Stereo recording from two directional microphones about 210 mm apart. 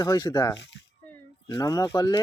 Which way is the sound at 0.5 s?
55° left (ahead or behind).